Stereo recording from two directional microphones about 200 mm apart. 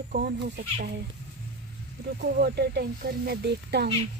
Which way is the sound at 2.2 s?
50° right (ahead or behind).